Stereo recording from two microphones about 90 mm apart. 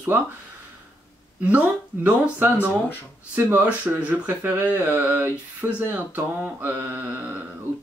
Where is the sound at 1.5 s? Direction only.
15° right (ahead or behind).